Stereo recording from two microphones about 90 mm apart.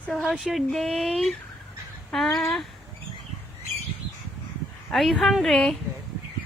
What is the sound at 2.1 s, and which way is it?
Speech, 5° left (ahead or behind).